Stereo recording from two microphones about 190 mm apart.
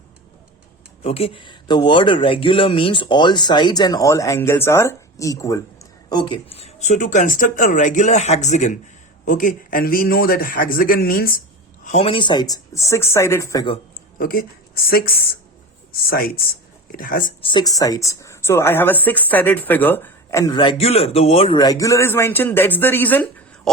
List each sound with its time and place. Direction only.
1.0 s a man's voice: 30° left (ahead or behind); by 11.4 s 50° left (ahead or behind)
11.9 s speech: 30° left (ahead or behind)
14.2 s a man's voice: 50° left (ahead or behind)
17.4 s speech: 25° left (ahead or behind)